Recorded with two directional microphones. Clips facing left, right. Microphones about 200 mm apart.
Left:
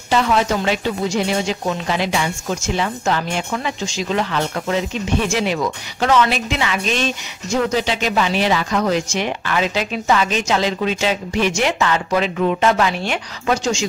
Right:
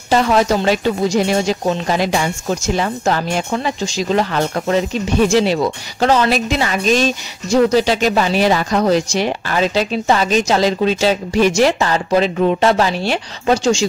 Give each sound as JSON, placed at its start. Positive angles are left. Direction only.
{"t": 0.1, "sound": "speech", "side_deg": -40}